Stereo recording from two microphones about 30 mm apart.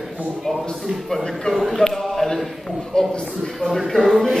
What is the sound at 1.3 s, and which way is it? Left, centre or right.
Speech, left.